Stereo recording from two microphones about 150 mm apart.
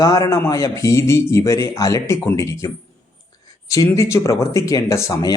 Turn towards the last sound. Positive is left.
turn(degrees=25)  # may be behind; listen again after turning